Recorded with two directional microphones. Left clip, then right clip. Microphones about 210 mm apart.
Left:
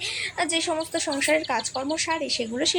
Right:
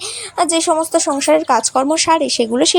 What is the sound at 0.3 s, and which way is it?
Speech, 30° right (ahead or behind).